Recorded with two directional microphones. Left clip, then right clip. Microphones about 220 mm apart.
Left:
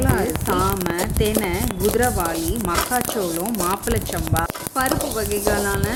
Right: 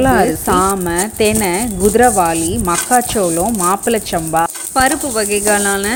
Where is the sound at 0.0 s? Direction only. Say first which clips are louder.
Right 10 dB; 35° right (ahead or behind).